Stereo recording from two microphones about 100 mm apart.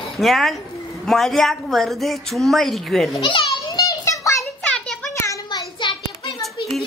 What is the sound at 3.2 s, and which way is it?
Speech, 60° left (ahead or behind).